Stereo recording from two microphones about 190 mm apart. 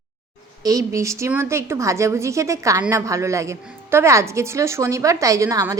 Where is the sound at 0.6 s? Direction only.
15° right (ahead or behind).